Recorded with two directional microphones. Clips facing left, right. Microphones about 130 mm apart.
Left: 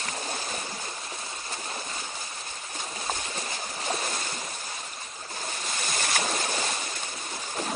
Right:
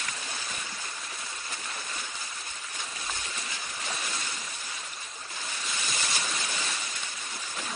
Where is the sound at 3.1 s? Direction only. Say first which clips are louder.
Left 7 dB; 40° left (ahead or behind).